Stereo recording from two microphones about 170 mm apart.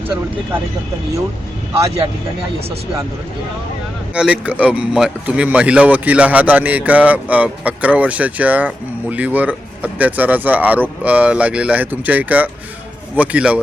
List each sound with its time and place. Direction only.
1.7 s speech: 20° right (ahead or behind)
4.1 s speech: 5° right (ahead or behind)